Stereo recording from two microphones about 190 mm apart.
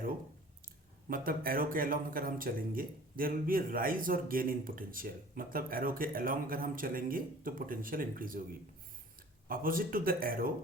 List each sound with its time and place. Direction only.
1.0 s speech: 50° right (ahead or behind)
9.5 s speech: 50° right (ahead or behind)